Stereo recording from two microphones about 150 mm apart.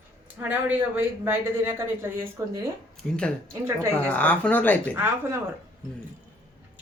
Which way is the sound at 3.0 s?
Centre (ahead or behind).